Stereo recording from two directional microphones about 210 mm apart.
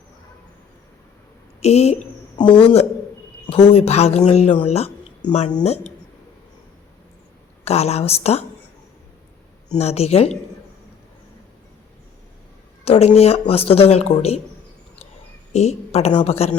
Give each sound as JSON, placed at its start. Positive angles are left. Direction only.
{"t": 1.6, "sound": "a woman's voice", "side_deg": 30}
{"t": 7.6, "sound": "speech", "side_deg": 30}
{"t": 9.7, "sound": "speech", "side_deg": 30}
{"t": 12.8, "sound": "speech", "side_deg": 30}
{"t": 15.5, "sound": "speech", "side_deg": 30}